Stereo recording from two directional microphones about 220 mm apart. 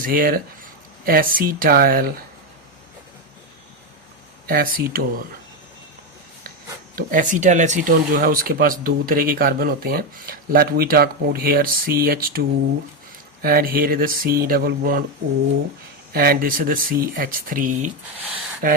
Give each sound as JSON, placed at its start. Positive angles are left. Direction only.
{"t": 0.0, "sound": "speech", "side_deg": -40}
{"t": 4.4, "sound": "speech", "side_deg": -45}
{"t": 6.9, "sound": "speech", "side_deg": -35}
{"t": 13.4, "sound": "speech", "side_deg": -40}
{"t": 16.1, "sound": "speech", "side_deg": -45}